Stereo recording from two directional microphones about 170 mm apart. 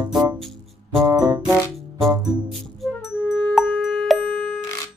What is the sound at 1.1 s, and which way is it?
Music, 20° right (ahead or behind).